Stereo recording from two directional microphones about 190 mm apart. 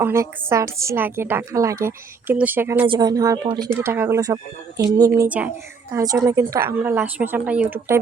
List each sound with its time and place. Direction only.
0.0 s a woman's voice: 15° right (ahead or behind)
2.8 s a woman's voice: 25° right (ahead or behind)